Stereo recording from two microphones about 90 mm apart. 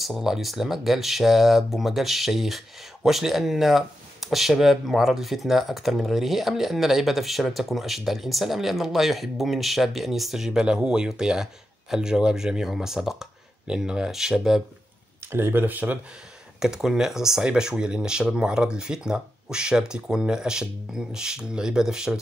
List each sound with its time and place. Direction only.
0.0 s speech: centre (ahead or behind)
15.3 s speech: 20° right (ahead or behind)
16.5 s speech: 5° right (ahead or behind)